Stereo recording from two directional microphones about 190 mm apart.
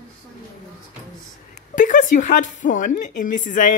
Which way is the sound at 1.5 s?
40° left (ahead or behind).